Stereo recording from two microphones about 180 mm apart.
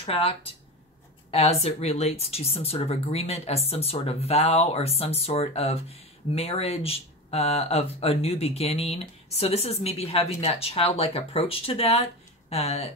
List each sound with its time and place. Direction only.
0.0 s speech: 35° left (ahead or behind)